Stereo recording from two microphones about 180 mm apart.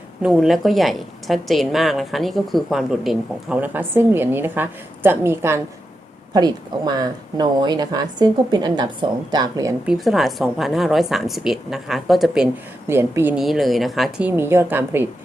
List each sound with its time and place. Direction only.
0.2 s a woman's voice: centre (ahead or behind); by 9.7 s 20° right (ahead or behind)
9.8 s a woman's voice: centre (ahead or behind)
12.9 s a woman's voice: 15° right (ahead or behind)